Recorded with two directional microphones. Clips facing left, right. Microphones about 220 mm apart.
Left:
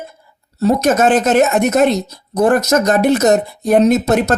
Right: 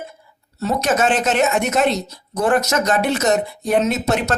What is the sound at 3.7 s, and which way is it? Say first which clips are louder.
Speech: left 7 dB; 35° left (ahead or behind).